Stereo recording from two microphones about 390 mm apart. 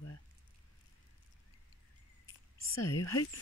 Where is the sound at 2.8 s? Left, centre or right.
Centre.